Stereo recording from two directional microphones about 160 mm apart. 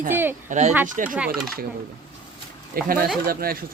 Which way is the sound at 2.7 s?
65° right (ahead or behind).